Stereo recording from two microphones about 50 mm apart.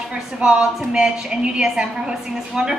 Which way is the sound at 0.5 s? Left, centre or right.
Centre.